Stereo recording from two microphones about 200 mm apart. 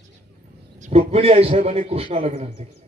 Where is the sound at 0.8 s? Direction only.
30° right (ahead or behind).